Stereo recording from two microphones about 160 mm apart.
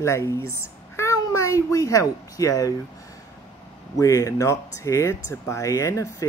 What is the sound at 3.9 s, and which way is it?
Speech, 20° left (ahead or behind).